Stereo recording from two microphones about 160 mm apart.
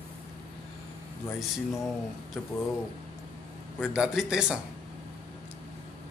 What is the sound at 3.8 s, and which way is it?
Speech, 5° right (ahead or behind).